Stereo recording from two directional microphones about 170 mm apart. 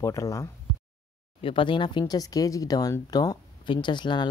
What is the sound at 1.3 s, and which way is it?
Speech, 30° left (ahead or behind).